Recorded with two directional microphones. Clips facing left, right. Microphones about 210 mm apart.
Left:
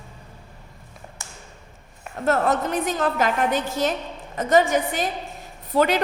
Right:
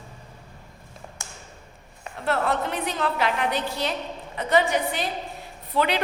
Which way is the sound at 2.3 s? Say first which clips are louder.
Left 4 dB; 45° left (ahead or behind).